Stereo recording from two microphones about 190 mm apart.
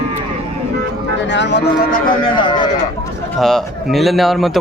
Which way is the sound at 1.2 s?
70° left (ahead or behind).